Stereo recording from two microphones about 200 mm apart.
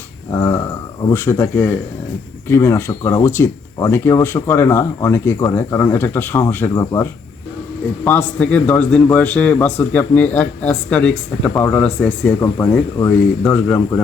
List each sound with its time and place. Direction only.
0.3 s a man's voice: 15° left (ahead or behind)